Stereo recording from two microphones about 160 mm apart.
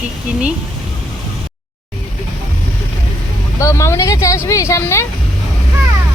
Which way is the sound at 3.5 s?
20° left (ahead or behind).